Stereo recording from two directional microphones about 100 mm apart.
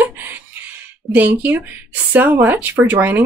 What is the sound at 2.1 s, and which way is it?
Speech, 20° right (ahead or behind).